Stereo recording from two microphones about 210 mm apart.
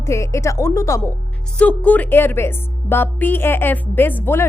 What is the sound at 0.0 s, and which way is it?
A woman's voice, 15° left (ahead or behind).